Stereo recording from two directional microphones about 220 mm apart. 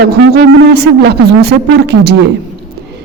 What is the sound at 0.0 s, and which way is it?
A man's voice, 45° right (ahead or behind).